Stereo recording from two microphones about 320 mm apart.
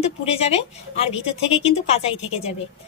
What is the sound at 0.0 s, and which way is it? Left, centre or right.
A woman's voice, centre.